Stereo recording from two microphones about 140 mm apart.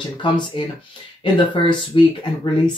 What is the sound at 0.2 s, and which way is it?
Speech, 35° left (ahead or behind).